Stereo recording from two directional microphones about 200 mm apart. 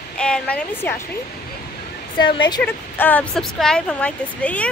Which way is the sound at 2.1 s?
25° left (ahead or behind).